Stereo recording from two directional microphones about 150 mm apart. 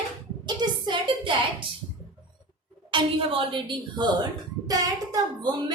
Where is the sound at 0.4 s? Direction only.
30° right (ahead or behind).